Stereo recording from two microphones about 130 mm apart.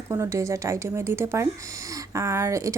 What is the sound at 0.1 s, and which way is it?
A woman's voice, 20° right (ahead or behind).